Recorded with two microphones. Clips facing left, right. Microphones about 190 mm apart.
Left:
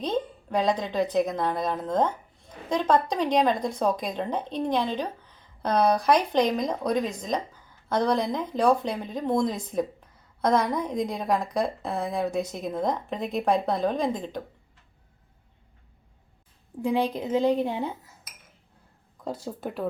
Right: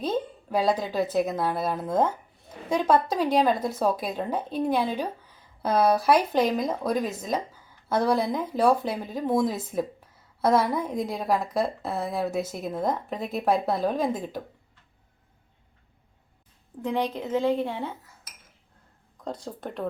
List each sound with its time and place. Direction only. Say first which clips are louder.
0.0 s a woman's voice: even; 5° right (ahead or behind)
16.8 s a woman's voice: left 2 dB; 10° left (ahead or behind)
19.2 s speech: left 2 dB; 5° left (ahead or behind)